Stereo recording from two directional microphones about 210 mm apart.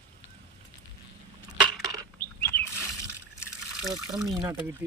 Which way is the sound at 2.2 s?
10° left (ahead or behind).